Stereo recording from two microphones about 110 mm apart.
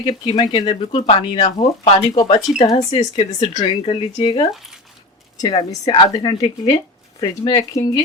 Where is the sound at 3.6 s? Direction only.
55° left (ahead or behind).